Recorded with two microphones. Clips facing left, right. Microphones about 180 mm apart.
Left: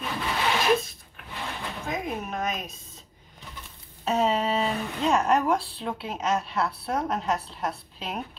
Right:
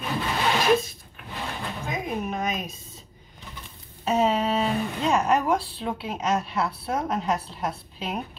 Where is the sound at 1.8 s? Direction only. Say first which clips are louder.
Right 1 dB; centre (ahead or behind).